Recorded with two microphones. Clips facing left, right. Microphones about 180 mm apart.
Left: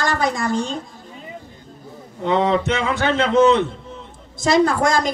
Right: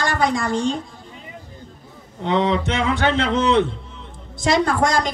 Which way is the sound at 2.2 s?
45° left (ahead or behind).